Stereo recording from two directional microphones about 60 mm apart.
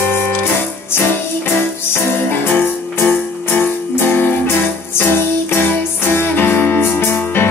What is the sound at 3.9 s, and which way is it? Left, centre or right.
Music, left.